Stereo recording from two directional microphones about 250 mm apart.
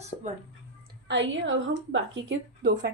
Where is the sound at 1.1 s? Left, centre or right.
Right.